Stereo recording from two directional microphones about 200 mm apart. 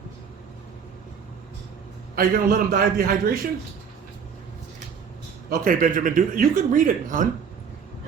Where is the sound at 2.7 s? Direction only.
45° right (ahead or behind).